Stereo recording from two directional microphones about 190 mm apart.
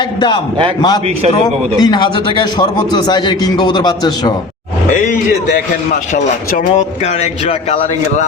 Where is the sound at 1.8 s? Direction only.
25° left (ahead or behind).